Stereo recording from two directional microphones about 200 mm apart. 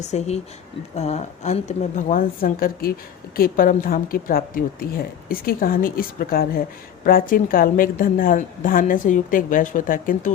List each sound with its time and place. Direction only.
0.0 s a woman's voice: 35° left (ahead or behind)